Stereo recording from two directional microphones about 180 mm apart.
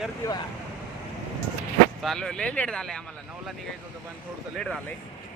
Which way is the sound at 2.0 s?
Centre (ahead or behind).